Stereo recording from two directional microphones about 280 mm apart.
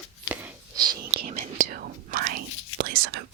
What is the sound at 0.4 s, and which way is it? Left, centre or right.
Whispering, centre.